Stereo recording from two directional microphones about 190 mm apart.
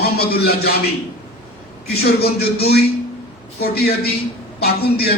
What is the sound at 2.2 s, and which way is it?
A man's voice, 55° left (ahead or behind).